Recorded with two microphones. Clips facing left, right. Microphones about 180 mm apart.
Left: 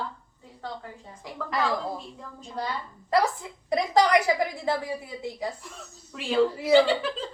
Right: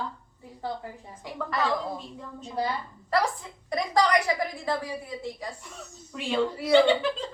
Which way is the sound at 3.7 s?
20° left (ahead or behind).